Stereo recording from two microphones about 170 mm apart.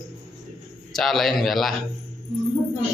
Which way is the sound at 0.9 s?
Centre (ahead or behind).